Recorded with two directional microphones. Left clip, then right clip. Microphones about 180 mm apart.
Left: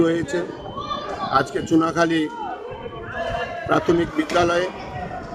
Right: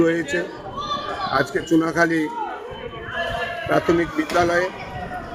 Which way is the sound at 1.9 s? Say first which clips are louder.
Right 1 dB; 30° left (ahead or behind).